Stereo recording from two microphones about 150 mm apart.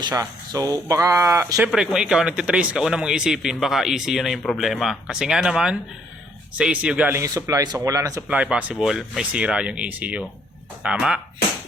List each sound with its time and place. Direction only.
0.0 s speech: 25° right (ahead or behind)
1.5 s speech: 5° right (ahead or behind)
7.3 s speech: 25° right (ahead or behind)
8.3 s speech: 10° right (ahead or behind)